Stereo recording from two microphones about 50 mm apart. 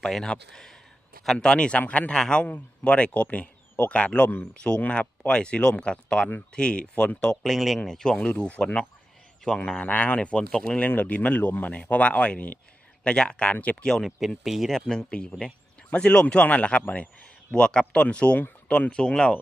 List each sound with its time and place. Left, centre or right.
0.0 s speech: centre; by 2.1 s left
2.1 s speech: centre
2.4 s speech: left
7.4 s speech: centre
7.8 s speech: centre
8.3 s speech: left
9.9 s speech: left
10.8 s speech: left
13.8 s speech: centre
14.2 s speech: centre
14.7 s speech: centre
15.1 s speech: left
16.2 s speech: left